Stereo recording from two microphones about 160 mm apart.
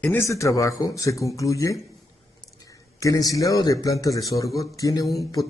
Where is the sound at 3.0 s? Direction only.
20° left (ahead or behind).